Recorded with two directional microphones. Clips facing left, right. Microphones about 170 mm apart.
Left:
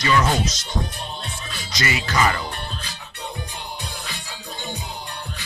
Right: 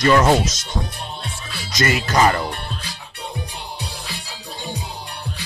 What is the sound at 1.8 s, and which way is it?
Speech, 45° right (ahead or behind).